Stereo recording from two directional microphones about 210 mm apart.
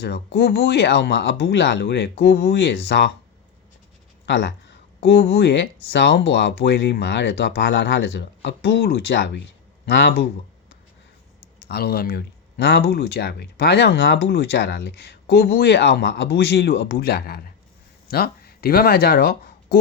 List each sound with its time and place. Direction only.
0.3 s speech: 50° left (ahead or behind)
4.3 s speech: 55° left (ahead or behind)
11.7 s speech: 45° left (ahead or behind)